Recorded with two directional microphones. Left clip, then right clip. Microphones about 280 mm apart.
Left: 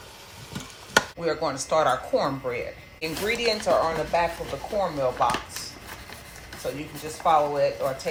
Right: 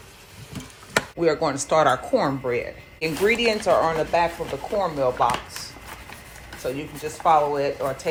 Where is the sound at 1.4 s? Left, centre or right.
Right.